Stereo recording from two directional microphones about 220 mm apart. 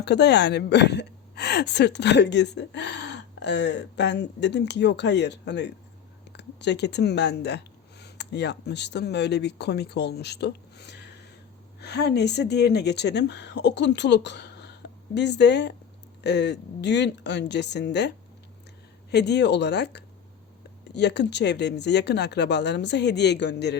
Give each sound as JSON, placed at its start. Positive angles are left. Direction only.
{"t": 0.0, "sound": "a woman's voice", "side_deg": 50}
{"t": 19.1, "sound": "speech", "side_deg": 50}